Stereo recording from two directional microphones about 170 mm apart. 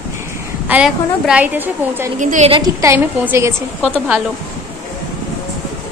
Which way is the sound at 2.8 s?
15° right (ahead or behind).